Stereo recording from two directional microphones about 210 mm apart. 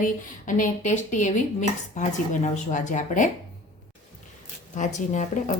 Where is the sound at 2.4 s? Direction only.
35° left (ahead or behind).